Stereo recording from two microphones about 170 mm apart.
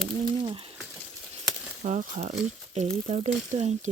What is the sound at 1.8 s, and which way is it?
Speech, 45° right (ahead or behind).